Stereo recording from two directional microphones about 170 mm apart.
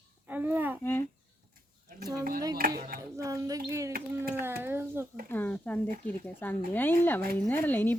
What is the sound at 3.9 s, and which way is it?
Speech, 55° right (ahead or behind).